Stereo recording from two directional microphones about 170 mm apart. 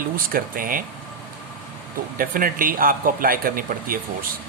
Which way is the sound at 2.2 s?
55° right (ahead or behind).